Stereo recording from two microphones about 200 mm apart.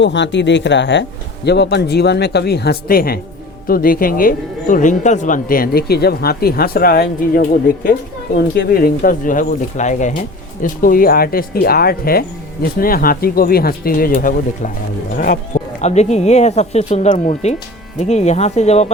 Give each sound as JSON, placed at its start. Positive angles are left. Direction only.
{"t": 0.0, "sound": "speech", "side_deg": 60}